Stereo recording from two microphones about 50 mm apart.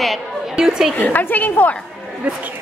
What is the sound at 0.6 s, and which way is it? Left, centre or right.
Speech, centre.